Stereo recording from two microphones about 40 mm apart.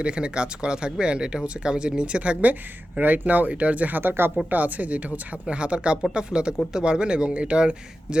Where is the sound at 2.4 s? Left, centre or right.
Right.